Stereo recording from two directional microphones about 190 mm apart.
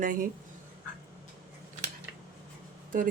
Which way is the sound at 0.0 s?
45° right (ahead or behind).